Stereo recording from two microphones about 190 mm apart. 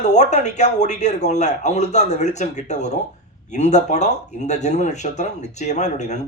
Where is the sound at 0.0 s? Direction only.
35° left (ahead or behind).